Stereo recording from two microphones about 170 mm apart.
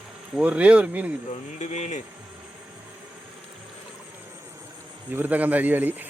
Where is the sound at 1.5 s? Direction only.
40° left (ahead or behind).